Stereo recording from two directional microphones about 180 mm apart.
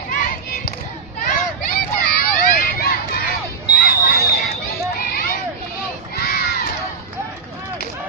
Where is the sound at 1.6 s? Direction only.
55° left (ahead or behind).